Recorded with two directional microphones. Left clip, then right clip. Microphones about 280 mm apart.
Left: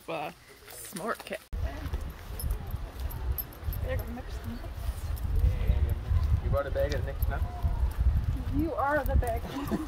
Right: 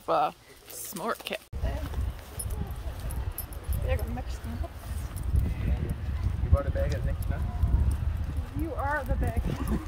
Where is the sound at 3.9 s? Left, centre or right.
Right.